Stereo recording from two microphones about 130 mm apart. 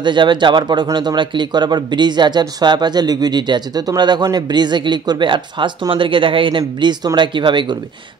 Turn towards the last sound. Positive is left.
turn(degrees=-35)  # may be behind; listen again after turning